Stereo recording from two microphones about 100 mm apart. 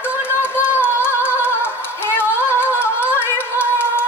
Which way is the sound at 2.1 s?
25° left (ahead or behind).